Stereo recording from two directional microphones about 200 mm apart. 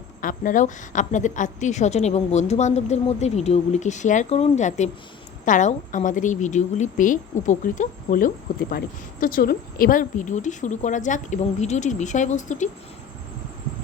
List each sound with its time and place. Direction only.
0.2 s a woman's voice: 40° left (ahead or behind)